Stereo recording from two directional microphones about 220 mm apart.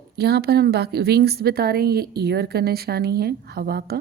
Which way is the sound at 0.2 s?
45° right (ahead or behind).